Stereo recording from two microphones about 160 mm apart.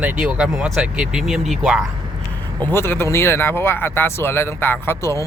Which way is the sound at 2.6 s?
15° left (ahead or behind).